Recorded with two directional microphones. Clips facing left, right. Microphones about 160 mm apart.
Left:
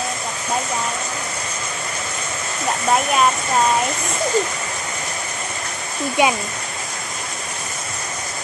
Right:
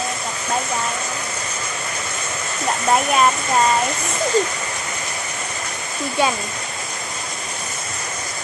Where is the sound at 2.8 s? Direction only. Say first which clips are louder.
Right 1 dB; centre (ahead or behind).